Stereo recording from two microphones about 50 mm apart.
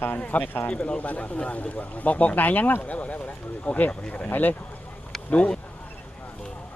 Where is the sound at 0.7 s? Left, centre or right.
Left.